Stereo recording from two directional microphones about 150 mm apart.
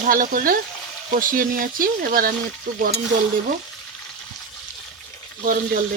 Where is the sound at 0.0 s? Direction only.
70° right (ahead or behind).